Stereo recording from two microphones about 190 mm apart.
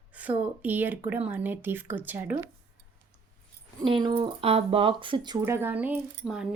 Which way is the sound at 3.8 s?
25° right (ahead or behind).